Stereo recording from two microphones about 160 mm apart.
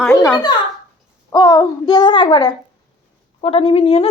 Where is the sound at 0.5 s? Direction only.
25° left (ahead or behind).